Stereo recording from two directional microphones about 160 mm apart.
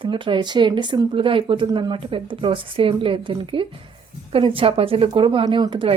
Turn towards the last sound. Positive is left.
turn(degrees=-30)  # may be behind; listen again after turning